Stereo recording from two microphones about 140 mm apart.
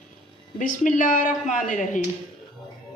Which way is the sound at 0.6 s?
65° left (ahead or behind).